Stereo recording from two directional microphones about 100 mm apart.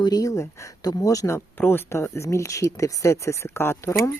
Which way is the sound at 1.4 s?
20° left (ahead or behind).